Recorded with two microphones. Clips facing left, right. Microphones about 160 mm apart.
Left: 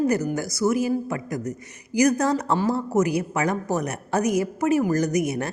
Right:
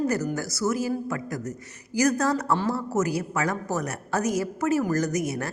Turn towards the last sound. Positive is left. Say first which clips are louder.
# left 4 dB
turn(degrees=20)  # may be behind; listen again after turning